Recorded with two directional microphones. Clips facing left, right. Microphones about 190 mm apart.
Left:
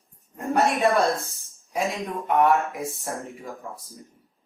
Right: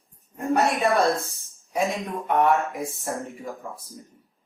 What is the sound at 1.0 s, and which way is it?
Speech, 15° left (ahead or behind).